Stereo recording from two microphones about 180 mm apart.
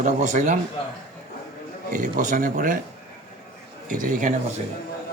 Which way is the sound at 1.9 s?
45° right (ahead or behind).